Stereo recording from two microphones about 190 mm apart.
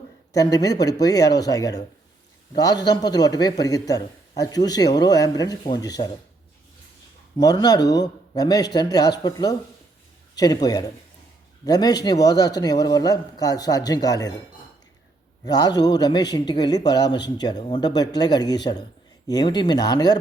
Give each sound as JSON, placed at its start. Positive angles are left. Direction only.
{"t": 0.3, "sound": "a man's voice", "side_deg": 20}
{"t": 7.3, "sound": "a man's voice", "side_deg": 20}
{"t": 15.4, "sound": "a man's voice", "side_deg": 20}